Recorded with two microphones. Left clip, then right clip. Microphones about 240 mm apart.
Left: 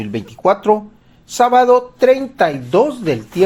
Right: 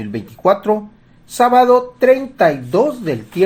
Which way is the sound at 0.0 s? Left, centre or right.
Left.